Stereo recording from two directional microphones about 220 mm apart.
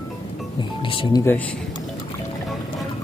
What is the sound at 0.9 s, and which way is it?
Speech, 20° left (ahead or behind).